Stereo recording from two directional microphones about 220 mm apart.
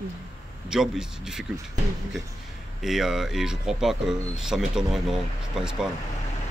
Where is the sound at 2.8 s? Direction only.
Centre (ahead or behind).